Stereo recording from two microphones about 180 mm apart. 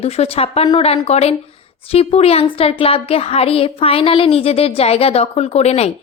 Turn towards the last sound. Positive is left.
turn(degrees=35)  # may be behind; listen again after turning